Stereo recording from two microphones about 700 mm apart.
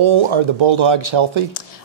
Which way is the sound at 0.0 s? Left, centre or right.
Right.